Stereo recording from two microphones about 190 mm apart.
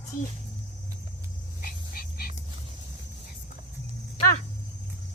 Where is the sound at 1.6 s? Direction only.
50° left (ahead or behind).